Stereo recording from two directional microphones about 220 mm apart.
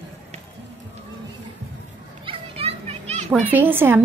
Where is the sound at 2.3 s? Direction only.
25° right (ahead or behind).